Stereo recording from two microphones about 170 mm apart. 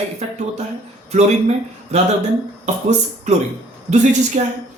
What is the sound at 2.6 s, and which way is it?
Speech, 40° right (ahead or behind).